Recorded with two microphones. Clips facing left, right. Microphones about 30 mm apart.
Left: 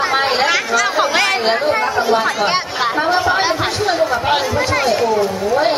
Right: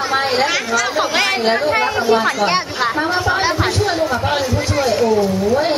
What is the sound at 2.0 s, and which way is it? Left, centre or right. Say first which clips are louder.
Speech: even; centre.